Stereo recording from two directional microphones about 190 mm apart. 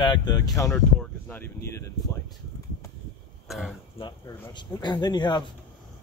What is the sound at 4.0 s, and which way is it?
Speech, 25° left (ahead or behind).